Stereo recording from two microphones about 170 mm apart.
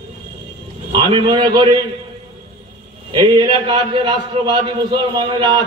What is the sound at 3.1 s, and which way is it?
A man's voice, 25° right (ahead or behind).